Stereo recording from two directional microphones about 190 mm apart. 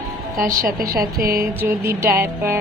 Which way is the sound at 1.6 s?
10° right (ahead or behind).